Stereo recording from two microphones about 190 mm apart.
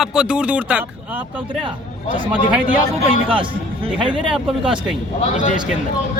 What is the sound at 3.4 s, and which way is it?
Speech, 25° right (ahead or behind).